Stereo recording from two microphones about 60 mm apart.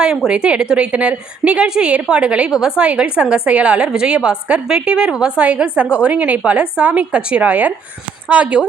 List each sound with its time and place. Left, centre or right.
0.3 s a woman's voice: centre